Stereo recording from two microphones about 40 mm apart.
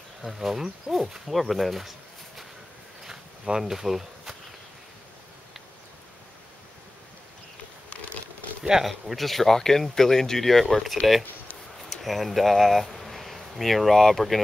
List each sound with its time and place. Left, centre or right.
0.2 s speech: centre
3.1 s a sound: centre
3.7 s speech: centre
8.8 s speech: centre